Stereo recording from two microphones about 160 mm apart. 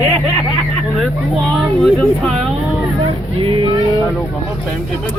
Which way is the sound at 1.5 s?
5° left (ahead or behind).